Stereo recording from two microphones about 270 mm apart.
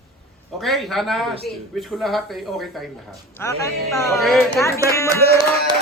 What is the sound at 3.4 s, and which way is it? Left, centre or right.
A man's voice, centre.